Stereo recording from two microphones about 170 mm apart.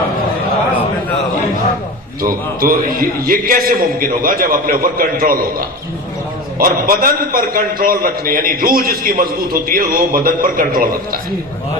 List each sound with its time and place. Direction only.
2.2 s a man's voice: 55° right (ahead or behind)